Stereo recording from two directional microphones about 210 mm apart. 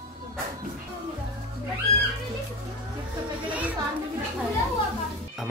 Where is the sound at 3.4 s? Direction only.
5° right (ahead or behind).